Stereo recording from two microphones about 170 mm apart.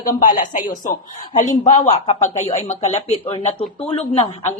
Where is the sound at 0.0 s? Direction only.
55° left (ahead or behind).